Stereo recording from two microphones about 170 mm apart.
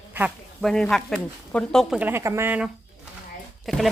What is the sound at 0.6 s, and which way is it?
Speech, 5° left (ahead or behind).